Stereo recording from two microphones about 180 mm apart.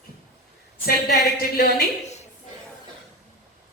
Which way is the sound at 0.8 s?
60° left (ahead or behind).